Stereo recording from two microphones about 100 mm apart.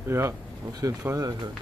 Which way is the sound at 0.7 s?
35° right (ahead or behind).